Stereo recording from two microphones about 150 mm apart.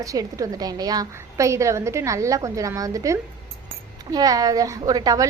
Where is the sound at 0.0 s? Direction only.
20° right (ahead or behind).